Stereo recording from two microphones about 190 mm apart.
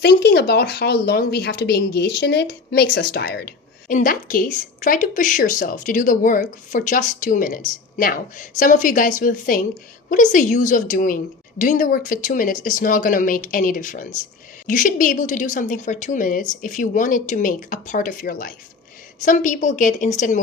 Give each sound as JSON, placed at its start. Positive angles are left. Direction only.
{"t": 0.0, "sound": "a woman's voice", "side_deg": 60}